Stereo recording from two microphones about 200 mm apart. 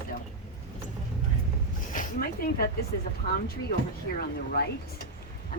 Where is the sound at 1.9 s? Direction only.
45° left (ahead or behind).